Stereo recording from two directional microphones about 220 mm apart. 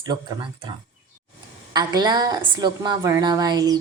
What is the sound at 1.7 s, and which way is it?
A woman's voice, 20° right (ahead or behind).